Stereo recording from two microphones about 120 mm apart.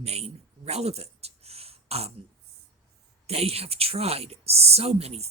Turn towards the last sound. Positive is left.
turn(degrees=-60)  # may be behind; listen again after turning